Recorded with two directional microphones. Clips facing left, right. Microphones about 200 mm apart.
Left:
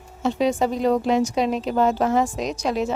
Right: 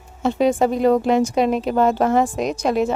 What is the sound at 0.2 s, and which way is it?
A woman's voice, 55° right (ahead or behind).